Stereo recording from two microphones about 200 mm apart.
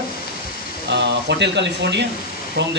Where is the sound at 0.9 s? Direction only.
60° right (ahead or behind).